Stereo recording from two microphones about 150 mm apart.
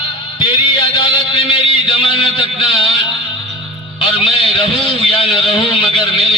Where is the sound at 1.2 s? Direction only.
35° left (ahead or behind).